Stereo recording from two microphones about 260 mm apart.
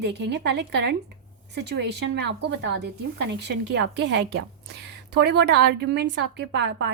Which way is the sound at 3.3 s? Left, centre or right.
Right.